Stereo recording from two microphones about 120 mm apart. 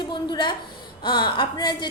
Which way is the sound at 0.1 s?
40° left (ahead or behind).